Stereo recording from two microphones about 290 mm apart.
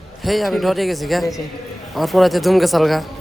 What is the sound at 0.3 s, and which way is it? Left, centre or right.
A man's voice, centre.